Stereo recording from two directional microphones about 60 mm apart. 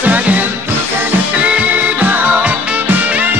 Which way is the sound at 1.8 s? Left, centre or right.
Right.